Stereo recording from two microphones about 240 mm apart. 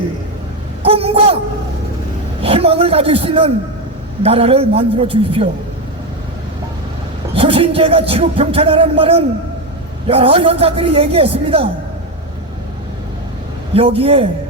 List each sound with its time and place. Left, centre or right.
0.8 s speech: right
2.4 s speech: right
7.3 s speech: right
13.7 s speech: right